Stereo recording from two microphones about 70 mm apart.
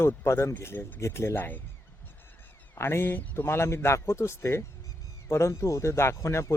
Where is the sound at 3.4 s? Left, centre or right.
Left.